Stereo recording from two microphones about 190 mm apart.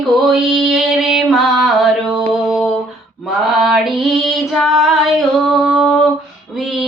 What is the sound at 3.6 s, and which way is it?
Female singing, centre (ahead or behind).